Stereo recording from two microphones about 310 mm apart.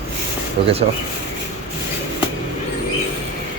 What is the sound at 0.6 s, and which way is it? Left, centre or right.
Speech, right.